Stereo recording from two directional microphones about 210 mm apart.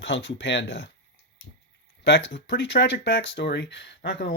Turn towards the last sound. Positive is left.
turn(degrees=50)  # may be behind; listen again after turning